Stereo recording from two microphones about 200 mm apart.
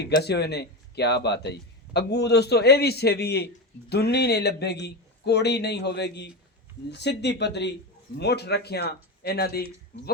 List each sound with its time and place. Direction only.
0.2 s speech: 55° left (ahead or behind)